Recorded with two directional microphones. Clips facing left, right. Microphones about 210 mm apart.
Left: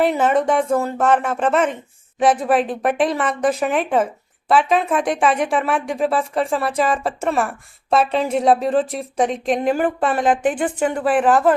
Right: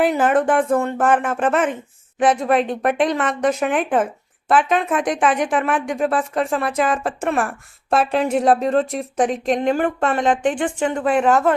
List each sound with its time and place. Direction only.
0.0 s a woman's voice: centre (ahead or behind)